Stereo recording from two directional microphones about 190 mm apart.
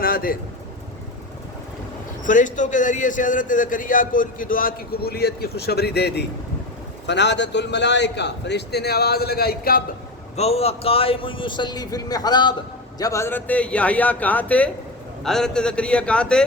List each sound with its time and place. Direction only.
0.0 s a sound: 50° left (ahead or behind)
2.2 s a man's voice: 40° left (ahead or behind)
10.3 s a man's voice: 35° left (ahead or behind); by 16.4 s 5° left (ahead or behind)